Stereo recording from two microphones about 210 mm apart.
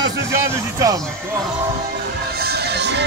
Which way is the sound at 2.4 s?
50° right (ahead or behind).